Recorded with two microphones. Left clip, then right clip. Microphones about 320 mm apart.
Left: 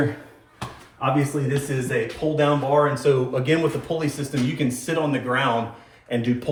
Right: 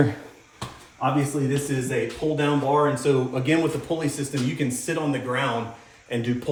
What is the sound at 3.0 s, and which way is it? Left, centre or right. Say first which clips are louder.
Speech: left 2 dB; centre.